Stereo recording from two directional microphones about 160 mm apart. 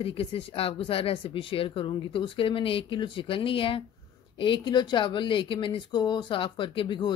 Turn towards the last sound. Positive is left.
turn(degrees=30)  # may be behind; listen again after turning